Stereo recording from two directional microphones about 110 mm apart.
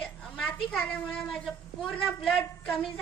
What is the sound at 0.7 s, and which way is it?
A woman's voice, 5° left (ahead or behind).